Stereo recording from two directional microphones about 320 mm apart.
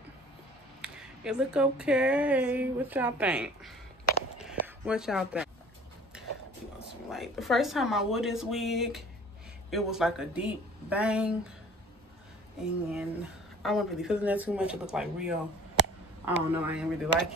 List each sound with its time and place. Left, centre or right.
0.7 s speech: centre
4.4 s a sound: centre
7.1 s speech: centre
12.5 s speech: centre